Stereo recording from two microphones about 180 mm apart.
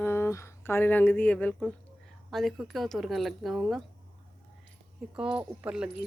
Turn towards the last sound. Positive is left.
turn(degrees=-5)  # may be behind; listen again after turning